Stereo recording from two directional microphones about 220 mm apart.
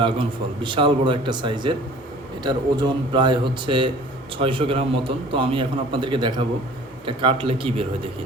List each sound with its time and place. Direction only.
0.0 s a man's voice: 20° right (ahead or behind)